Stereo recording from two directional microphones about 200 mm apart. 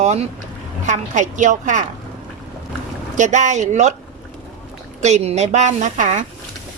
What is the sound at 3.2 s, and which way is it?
Speech, 35° right (ahead or behind).